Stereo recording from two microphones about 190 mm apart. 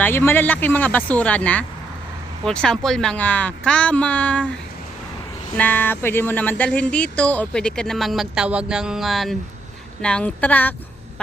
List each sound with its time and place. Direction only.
0.0 s speech: 10° left (ahead or behind)
5.5 s speech: 10° left (ahead or behind)